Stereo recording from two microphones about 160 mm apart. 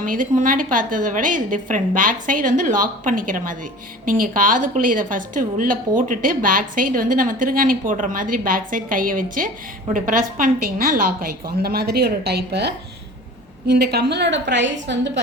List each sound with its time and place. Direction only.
0.0 s a woman's voice: 55° right (ahead or behind); by 15.2 s 90° right